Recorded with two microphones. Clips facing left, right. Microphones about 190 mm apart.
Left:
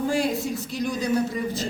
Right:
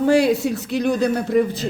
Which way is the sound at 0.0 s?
70° right (ahead or behind).